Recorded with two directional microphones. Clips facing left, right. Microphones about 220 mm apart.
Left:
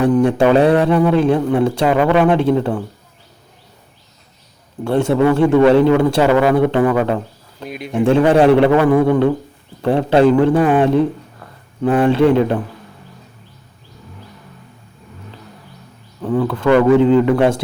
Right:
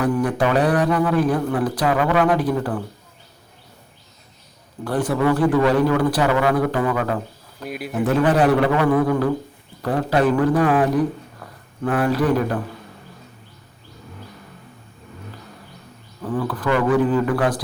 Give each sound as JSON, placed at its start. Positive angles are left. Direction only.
{"t": 0.0, "sound": "speech", "side_deg": 25}
{"t": 4.8, "sound": "speech", "side_deg": 25}
{"t": 7.6, "sound": "speech", "side_deg": -5}
{"t": 7.9, "sound": "speech", "side_deg": 30}
{"t": 16.5, "sound": "speech", "side_deg": 25}